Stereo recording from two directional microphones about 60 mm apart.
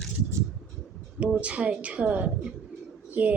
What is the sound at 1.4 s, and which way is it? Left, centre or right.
A woman's voice, centre.